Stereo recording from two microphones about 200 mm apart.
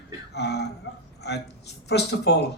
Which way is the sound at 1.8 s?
55° left (ahead or behind).